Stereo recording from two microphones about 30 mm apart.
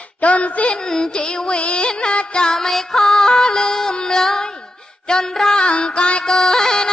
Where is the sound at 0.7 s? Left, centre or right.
Left.